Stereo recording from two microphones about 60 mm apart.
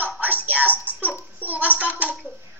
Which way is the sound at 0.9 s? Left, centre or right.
Right.